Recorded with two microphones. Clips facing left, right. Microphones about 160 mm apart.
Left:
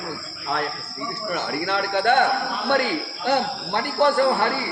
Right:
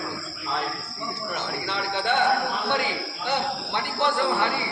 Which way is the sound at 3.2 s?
45° left (ahead or behind).